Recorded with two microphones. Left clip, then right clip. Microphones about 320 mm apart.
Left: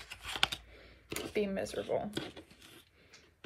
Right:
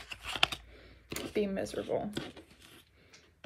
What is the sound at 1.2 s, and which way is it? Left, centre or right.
Speech, centre.